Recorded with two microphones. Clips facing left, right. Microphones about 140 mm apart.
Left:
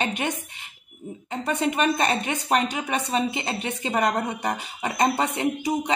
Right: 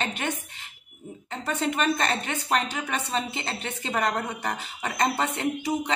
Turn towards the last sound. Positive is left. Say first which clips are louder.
# left 2 dB
turn(degrees=15)  # may be behind; listen again after turning